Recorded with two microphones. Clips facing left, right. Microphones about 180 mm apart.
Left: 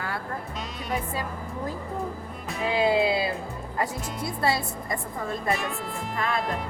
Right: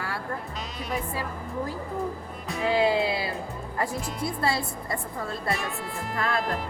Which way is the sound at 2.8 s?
20° left (ahead or behind).